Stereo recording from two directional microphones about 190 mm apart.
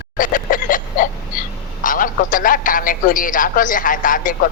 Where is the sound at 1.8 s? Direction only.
45° left (ahead or behind).